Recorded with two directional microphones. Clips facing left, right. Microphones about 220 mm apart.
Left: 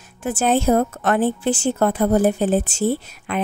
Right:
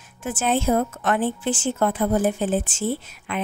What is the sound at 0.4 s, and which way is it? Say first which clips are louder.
A woman's voice: left 4 dB; 40° left (ahead or behind).